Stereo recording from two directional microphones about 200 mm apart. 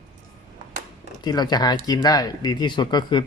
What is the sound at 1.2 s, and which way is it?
Speech, 20° left (ahead or behind).